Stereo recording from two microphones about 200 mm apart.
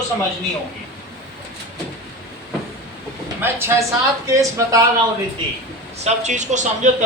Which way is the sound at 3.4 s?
10° right (ahead or behind).